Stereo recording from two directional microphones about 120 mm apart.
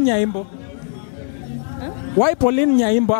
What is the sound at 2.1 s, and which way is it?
A man's voice, 20° left (ahead or behind).